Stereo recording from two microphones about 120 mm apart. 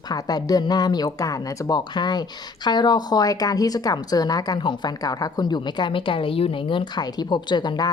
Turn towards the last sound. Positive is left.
turn(degrees=35)  # may be behind; listen again after turning